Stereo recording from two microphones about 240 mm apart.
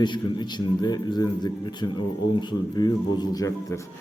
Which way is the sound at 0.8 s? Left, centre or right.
Centre.